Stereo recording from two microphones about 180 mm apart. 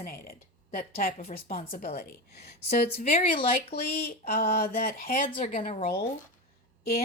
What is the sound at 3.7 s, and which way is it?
Speech, 55° left (ahead or behind).